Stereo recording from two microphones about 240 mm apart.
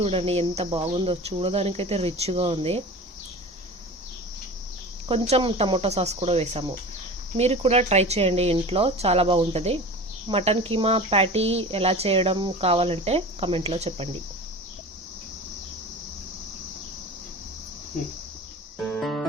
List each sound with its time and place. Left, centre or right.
0.0 s speech: right
5.0 s speech: right
18.8 s music: centre